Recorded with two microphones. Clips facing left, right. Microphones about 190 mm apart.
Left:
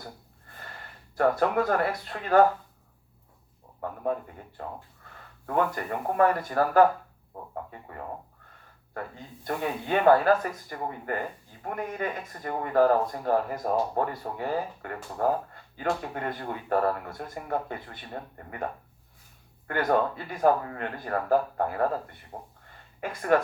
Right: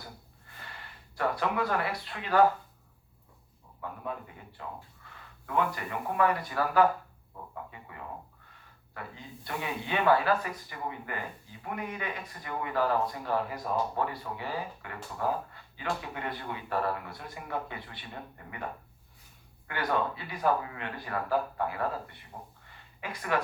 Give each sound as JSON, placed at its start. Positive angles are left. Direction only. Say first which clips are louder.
{"t": 0.5, "sound": "speech", "louder": "left 3 dB", "side_deg": 45}
{"t": 3.8, "sound": "speech", "louder": "left 8 dB", "side_deg": 45}
{"t": 5.0, "sound": "a sound", "louder": "left 2 dB", "side_deg": 45}
{"t": 5.5, "sound": "speech", "louder": "left 4 dB", "side_deg": 45}